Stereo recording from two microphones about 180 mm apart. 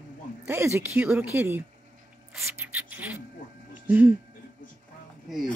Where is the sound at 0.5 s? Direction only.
15° right (ahead or behind).